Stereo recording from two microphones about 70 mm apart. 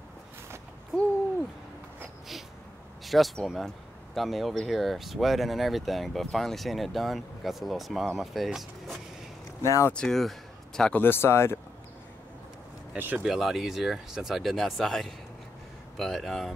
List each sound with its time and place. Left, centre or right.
3.1 s speech: centre
9.6 s speech: left
9.9 s speech: centre
10.9 s speech: left
12.9 s speech: right
13.2 s speech: centre